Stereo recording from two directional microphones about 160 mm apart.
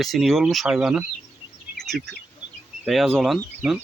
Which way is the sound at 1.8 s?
Centre (ahead or behind).